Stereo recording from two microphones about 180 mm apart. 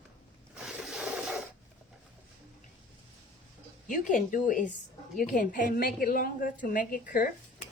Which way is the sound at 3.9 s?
45° left (ahead or behind).